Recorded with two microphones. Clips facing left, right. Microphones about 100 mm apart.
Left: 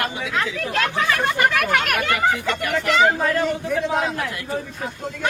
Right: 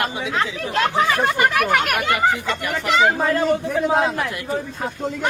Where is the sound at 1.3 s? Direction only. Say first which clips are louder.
Right 1 dB; 5° right (ahead or behind).